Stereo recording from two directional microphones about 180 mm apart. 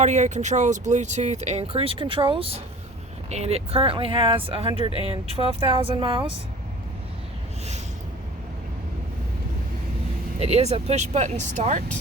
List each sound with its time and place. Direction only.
0.0 s speech: 40° right (ahead or behind)
10.4 s speech: 35° right (ahead or behind)